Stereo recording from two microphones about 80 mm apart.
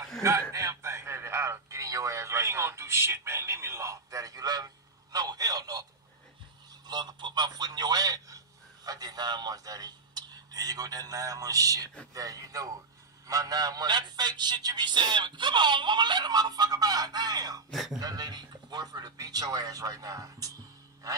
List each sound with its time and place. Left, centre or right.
0.2 s a man's voice: right
6.9 s a man's voice: right
17.6 s speech: centre
17.9 s speech: right